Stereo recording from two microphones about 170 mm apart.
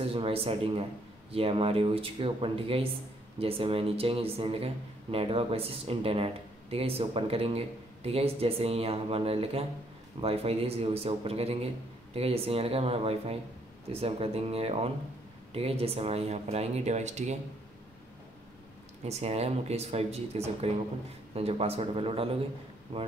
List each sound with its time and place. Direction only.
0.0 s speech: 35° right (ahead or behind)
19.0 s speech: 40° right (ahead or behind)